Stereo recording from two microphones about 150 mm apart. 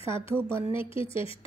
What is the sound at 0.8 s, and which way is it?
Speech, 35° left (ahead or behind).